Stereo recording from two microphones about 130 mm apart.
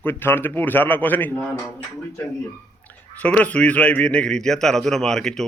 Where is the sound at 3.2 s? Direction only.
10° left (ahead or behind).